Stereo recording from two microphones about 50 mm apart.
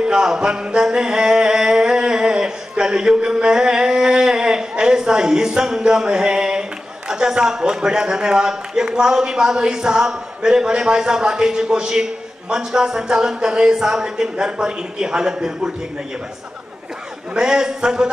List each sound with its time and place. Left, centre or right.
0.0 s a sound: centre
7.1 s a man's voice: centre
17.3 s a man's voice: centre